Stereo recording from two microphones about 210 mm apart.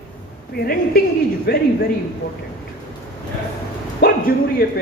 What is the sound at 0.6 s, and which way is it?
Speech, 45° left (ahead or behind).